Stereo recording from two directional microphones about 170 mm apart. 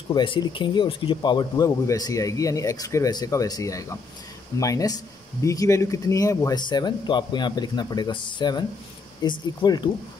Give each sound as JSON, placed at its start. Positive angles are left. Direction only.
{"t": 0.1, "sound": "speech", "side_deg": 25}